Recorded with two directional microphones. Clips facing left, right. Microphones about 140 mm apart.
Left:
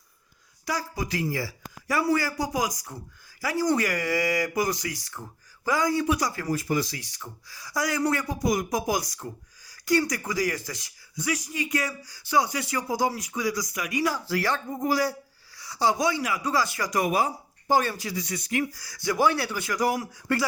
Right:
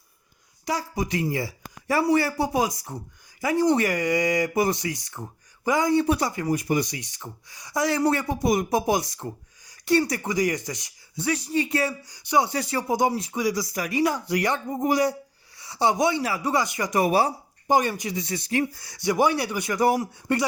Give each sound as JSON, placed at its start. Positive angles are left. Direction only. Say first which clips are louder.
{"t": 0.6, "sound": "speech", "louder": "right 3 dB", "side_deg": -20}
{"t": 11.3, "sound": "speech", "louder": "right 4 dB", "side_deg": -35}
{"t": 13.7, "sound": "speech", "louder": "right 3 dB", "side_deg": -35}
{"t": 14.0, "sound": "speech", "louder": "right 3 dB", "side_deg": -20}
{"t": 17.7, "sound": "speech", "louder": "right 2 dB", "side_deg": -15}